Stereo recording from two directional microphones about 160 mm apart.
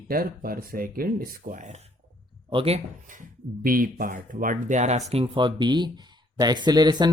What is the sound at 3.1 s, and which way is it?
Speech, 60° right (ahead or behind).